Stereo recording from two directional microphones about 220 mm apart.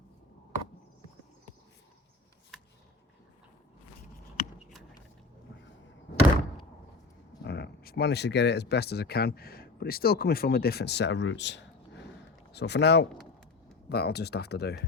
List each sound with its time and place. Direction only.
7.4 s speech: 50° left (ahead or behind)